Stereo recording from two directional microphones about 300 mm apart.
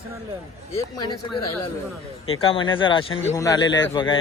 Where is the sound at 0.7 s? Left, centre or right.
Centre.